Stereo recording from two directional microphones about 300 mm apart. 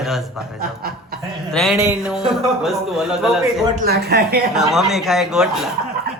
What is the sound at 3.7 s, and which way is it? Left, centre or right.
Speech, right.